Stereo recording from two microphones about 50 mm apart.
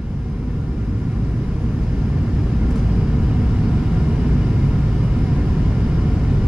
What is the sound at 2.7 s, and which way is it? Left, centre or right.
Vehicle, centre.